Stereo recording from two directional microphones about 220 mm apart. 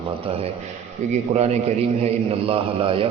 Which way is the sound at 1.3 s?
30° right (ahead or behind).